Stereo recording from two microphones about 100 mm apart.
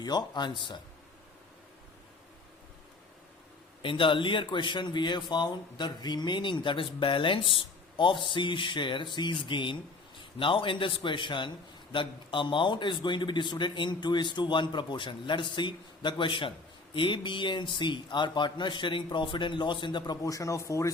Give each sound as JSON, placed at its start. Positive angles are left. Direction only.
{"t": 0.0, "sound": "a man's voice", "side_deg": 45}
{"t": 3.8, "sound": "a man's voice", "side_deg": 60}
{"t": 20.2, "sound": "speech", "side_deg": 35}